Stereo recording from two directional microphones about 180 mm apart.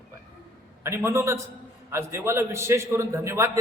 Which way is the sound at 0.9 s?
15° right (ahead or behind).